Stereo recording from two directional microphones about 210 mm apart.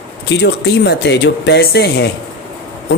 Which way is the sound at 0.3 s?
55° left (ahead or behind).